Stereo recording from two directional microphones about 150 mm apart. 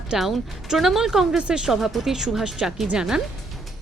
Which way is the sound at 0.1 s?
Centre (ahead or behind).